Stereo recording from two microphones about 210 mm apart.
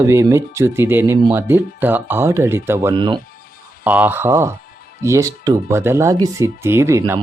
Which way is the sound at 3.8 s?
5° right (ahead or behind).